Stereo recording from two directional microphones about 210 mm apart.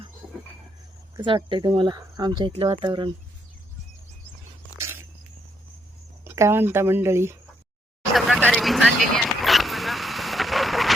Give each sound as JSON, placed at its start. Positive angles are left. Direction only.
{"t": 1.1, "sound": "speech", "side_deg": -20}
{"t": 4.8, "sound": "a sound", "side_deg": -10}
{"t": 6.2, "sound": "speech", "side_deg": -15}
{"t": 8.1, "sound": "vehicle", "side_deg": 5}